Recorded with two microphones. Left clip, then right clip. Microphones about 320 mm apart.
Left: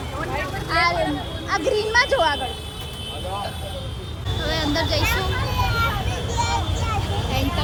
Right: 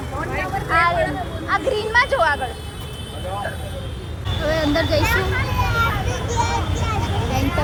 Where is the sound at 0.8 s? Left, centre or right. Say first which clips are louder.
Right 2 dB; left.